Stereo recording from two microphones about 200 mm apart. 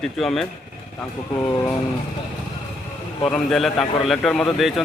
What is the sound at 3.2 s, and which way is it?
Speech, 5° left (ahead or behind).